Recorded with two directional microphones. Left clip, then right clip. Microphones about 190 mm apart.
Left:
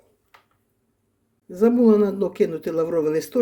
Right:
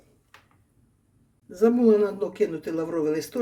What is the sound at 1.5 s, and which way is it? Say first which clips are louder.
Speech: left 2 dB; 40° left (ahead or behind).